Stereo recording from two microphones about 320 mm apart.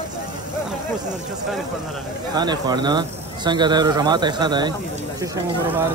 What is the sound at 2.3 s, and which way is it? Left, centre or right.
Speech, centre.